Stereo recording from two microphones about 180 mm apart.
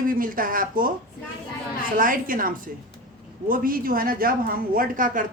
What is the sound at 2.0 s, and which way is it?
Speech, 50° right (ahead or behind).